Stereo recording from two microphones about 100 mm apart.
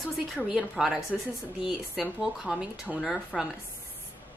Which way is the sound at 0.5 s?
5° right (ahead or behind).